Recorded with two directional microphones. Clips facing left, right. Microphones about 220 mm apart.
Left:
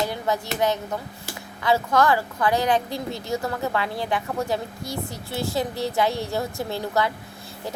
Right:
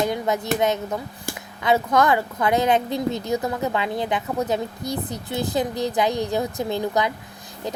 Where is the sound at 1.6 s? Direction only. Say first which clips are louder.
Right 1 dB; 20° right (ahead or behind).